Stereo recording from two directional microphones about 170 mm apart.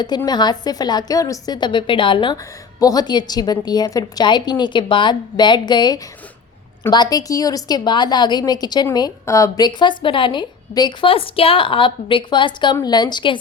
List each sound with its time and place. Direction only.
0.3 s a woman's voice: 25° left (ahead or behind)